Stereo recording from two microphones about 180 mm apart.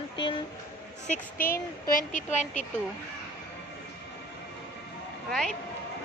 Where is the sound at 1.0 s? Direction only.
50° left (ahead or behind).